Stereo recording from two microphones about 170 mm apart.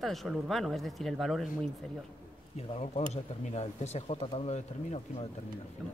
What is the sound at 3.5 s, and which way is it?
Speech, 40° left (ahead or behind).